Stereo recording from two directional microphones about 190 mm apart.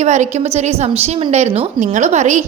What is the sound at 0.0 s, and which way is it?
A woman's voice, 35° right (ahead or behind).